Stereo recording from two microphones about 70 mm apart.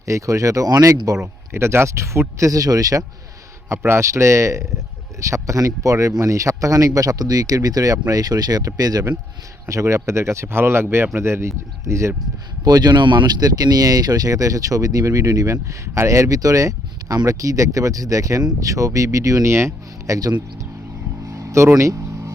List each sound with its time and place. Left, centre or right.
0.0 s speech: right
1.5 s speech: right
3.7 s speech: right
9.6 s speech: right
12.6 s speech: right
20.1 s speech: right
21.2 s vehicle: right